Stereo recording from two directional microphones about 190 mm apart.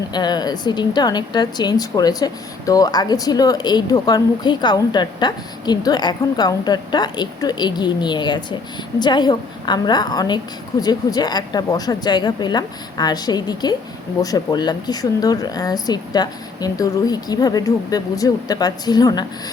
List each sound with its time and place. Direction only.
0.1 s a woman's voice: 20° left (ahead or behind)